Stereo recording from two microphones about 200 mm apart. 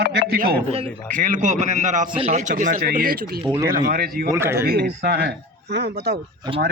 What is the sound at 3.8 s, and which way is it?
Speech, 50° right (ahead or behind).